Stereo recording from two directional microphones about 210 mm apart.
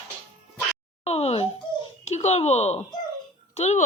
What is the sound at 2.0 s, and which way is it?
A child's voice, 30° left (ahead or behind).